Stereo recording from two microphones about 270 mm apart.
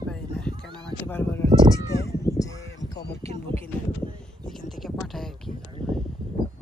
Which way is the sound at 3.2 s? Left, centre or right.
Right.